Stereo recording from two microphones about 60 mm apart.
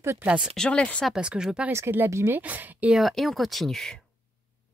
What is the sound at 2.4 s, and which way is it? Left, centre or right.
Speech, right.